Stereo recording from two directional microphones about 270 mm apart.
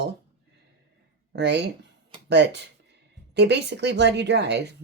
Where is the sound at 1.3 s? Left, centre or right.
Right.